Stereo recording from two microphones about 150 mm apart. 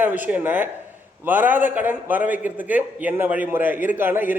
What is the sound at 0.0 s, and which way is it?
A man's voice, 10° right (ahead or behind).